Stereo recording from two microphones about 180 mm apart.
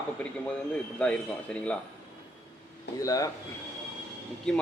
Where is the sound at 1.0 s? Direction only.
5° left (ahead or behind).